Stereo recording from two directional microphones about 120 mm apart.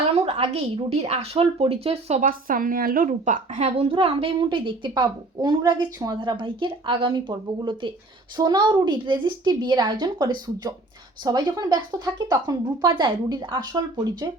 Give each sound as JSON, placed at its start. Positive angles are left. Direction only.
{"t": 0.1, "sound": "speech", "side_deg": -55}
{"t": 3.1, "sound": "a woman's voice", "side_deg": -90}